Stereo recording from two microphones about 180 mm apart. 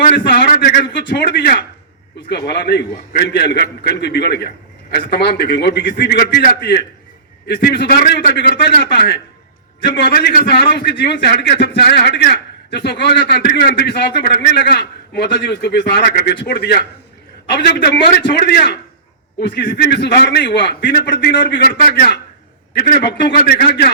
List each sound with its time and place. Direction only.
0.3 s a man's voice: 65° left (ahead or behind)
22.7 s a man's voice: 65° left (ahead or behind)